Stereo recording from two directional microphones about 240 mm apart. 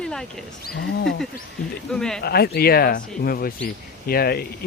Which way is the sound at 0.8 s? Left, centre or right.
Left.